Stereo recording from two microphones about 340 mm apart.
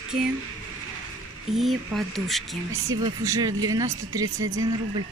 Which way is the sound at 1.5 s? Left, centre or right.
Centre.